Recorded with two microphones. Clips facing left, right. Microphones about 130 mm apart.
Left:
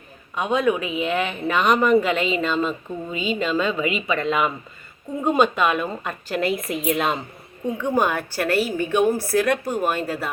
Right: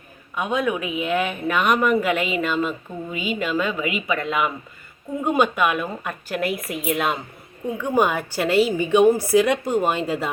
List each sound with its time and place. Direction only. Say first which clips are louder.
0.3 s speech: left 2 dB; 5° right (ahead or behind)